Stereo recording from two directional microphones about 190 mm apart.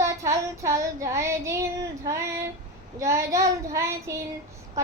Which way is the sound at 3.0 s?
15° right (ahead or behind).